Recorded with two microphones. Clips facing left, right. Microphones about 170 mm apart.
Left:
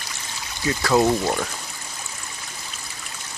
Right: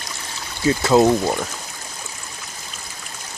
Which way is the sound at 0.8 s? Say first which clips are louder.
Right 3 dB; 25° right (ahead or behind).